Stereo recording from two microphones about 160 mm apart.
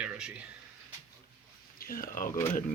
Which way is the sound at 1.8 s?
65° left (ahead or behind).